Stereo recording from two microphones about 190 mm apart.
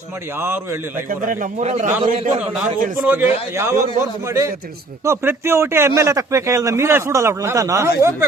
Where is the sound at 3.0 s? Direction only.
10° right (ahead or behind).